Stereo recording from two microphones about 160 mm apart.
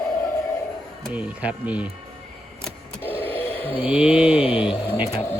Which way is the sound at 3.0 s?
10° left (ahead or behind).